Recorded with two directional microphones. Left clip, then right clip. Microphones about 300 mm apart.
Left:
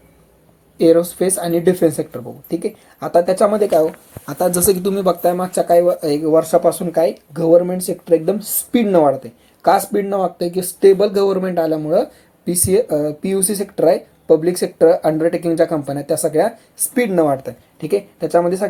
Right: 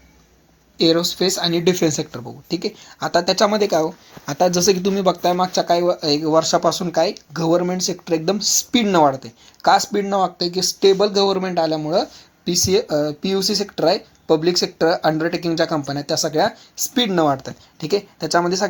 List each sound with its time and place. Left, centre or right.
0.8 s speech: centre